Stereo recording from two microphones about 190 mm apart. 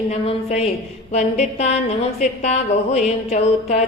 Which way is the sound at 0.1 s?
35° left (ahead or behind).